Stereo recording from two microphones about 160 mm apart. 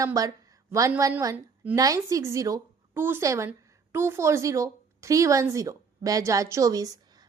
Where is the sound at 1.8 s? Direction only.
20° right (ahead or behind).